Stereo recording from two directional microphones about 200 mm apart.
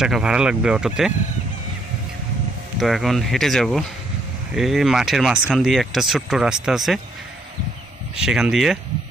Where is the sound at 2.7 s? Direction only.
Centre (ahead or behind).